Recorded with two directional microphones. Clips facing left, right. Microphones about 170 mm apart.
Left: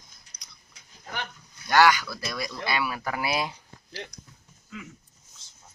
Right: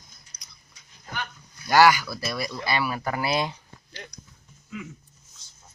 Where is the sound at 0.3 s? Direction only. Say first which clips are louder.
Even; centre (ahead or behind).